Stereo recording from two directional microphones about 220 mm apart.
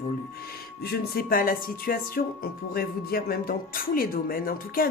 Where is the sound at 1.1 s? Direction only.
40° left (ahead or behind).